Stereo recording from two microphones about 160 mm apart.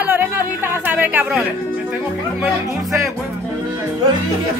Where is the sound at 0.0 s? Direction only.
15° right (ahead or behind).